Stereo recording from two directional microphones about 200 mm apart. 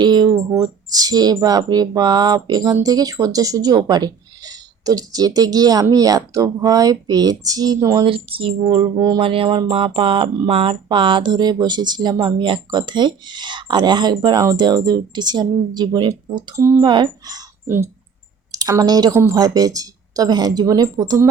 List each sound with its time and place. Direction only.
0.0 s speech: 20° right (ahead or behind)